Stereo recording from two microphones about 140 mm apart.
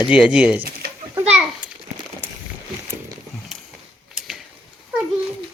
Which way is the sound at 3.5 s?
5° right (ahead or behind).